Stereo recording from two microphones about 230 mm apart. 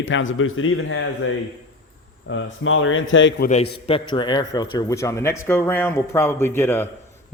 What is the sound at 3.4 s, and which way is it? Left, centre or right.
A man's voice, left.